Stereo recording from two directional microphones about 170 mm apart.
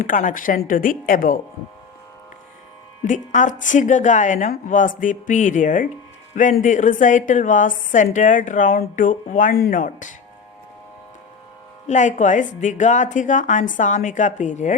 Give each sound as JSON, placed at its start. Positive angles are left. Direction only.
{"t": 0.0, "sound": "a woman's voice", "side_deg": 50}
{"t": 3.0, "sound": "a woman's voice", "side_deg": 50}
{"t": 11.9, "sound": "a woman's voice", "side_deg": 45}